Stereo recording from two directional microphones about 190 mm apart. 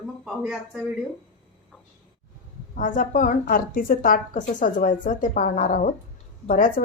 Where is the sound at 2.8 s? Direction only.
45° left (ahead or behind).